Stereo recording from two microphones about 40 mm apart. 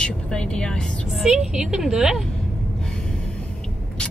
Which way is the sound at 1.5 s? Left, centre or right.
Centre.